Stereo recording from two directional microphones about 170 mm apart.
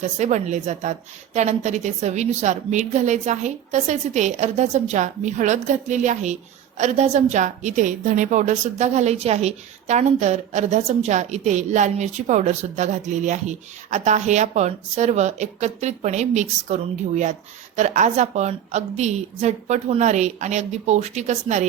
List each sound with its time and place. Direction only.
0.2 s a woman's voice: 45° right (ahead or behind)